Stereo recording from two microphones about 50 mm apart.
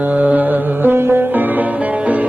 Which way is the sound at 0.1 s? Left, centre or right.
Right.